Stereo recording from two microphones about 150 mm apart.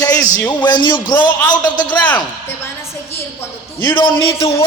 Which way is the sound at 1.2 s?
30° left (ahead or behind).